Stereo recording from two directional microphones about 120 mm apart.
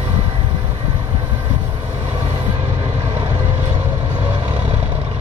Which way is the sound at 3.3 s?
20° right (ahead or behind).